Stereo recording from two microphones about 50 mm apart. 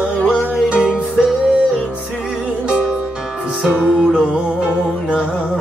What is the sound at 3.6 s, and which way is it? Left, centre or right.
Music, right.